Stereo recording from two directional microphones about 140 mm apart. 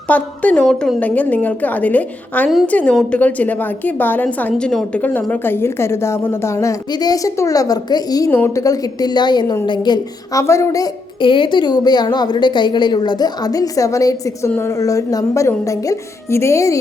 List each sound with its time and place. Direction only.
0.1 s a woman's voice: 10° left (ahead or behind)